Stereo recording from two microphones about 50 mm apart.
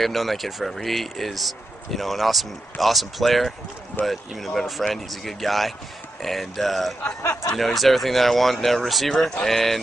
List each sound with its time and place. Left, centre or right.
0.0 s speech: centre
7.0 s speech: left
7.5 s speech: centre